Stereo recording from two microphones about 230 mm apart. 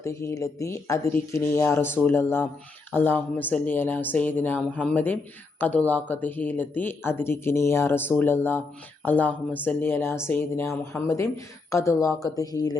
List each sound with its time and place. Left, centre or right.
0.0 s speech: centre